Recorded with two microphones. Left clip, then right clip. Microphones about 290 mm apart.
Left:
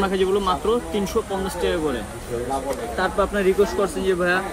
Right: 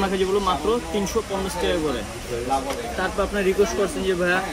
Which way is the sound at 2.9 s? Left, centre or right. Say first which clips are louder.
Left 3 dB; centre.